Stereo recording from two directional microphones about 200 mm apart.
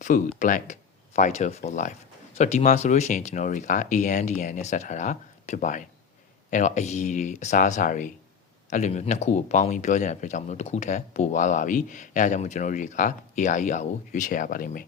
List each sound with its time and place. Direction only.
0.3 s speech: 40° left (ahead or behind)